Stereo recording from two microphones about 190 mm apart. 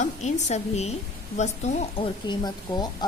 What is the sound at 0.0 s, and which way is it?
A woman's voice, 35° left (ahead or behind).